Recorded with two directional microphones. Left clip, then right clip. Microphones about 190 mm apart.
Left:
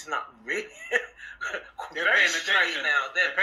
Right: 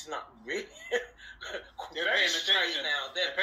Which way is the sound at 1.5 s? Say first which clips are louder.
Left 5 dB; 45° left (ahead or behind).